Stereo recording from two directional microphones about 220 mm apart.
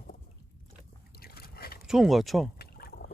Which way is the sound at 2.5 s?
45° left (ahead or behind).